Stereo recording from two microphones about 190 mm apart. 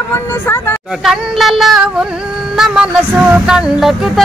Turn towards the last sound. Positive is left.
turn(degrees=-5)  # may be behind; listen again after turning